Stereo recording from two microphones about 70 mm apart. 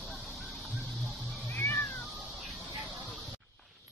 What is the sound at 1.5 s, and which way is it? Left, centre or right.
Cat, left.